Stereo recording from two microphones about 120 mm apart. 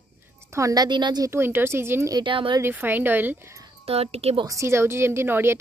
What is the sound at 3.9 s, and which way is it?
Speech, 60° right (ahead or behind).